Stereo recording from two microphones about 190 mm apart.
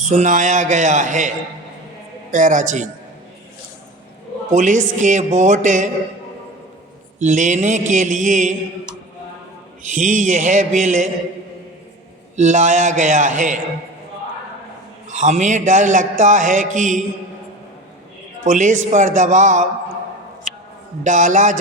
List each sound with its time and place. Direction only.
0.0 s speech: 40° right (ahead or behind)
2.3 s speech: 40° right (ahead or behind)
4.5 s speech: 40° right (ahead or behind)
7.2 s speech: 40° right (ahead or behind)
9.9 s speech: 40° right (ahead or behind)
12.4 s speech: 40° right (ahead or behind)
15.1 s speech: 40° right (ahead or behind)
18.4 s speech: 40° right (ahead or behind)
21.0 s speech: 40° right (ahead or behind)